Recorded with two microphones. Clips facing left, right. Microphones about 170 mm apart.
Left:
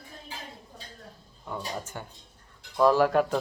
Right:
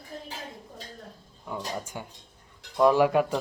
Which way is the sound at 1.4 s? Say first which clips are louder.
Right 1 dB; 10° right (ahead or behind).